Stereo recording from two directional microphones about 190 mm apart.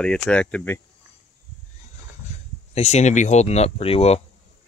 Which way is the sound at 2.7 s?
35° left (ahead or behind).